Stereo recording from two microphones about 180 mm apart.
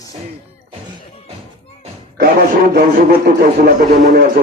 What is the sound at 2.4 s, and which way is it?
Speech, 50° right (ahead or behind).